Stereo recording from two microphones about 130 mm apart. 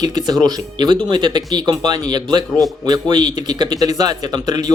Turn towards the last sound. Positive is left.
turn(degrees=-30)  # may be behind; listen again after turning